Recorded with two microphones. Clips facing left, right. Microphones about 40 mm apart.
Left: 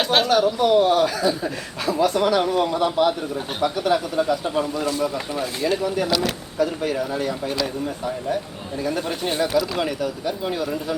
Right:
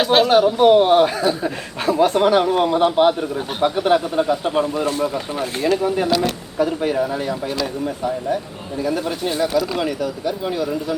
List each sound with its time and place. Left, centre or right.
0.0 s speech: centre
0.3 s speech: right
6.6 s speech: right; by 10.9 s centre